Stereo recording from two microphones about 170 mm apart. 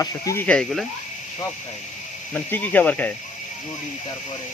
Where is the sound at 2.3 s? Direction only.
10° left (ahead or behind).